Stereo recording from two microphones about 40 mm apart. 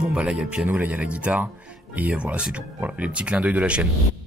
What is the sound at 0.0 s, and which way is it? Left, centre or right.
Speech, right.